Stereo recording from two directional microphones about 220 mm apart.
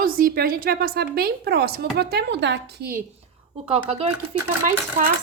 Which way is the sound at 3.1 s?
25° right (ahead or behind).